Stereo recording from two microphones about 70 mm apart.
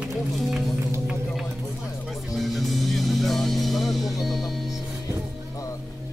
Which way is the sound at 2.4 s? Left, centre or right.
Centre.